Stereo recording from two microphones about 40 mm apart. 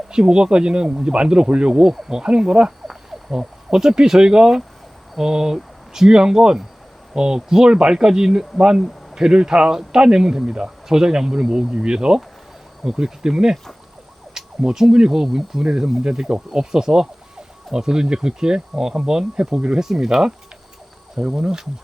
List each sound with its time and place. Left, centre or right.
0.1 s speech: right
1.8 s speech: centre
2.1 s speech: right
2.8 s frog: centre
3.7 s speech: centre
21.3 s speech: centre